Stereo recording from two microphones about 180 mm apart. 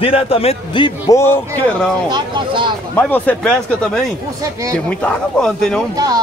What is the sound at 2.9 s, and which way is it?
Speech, 10° left (ahead or behind).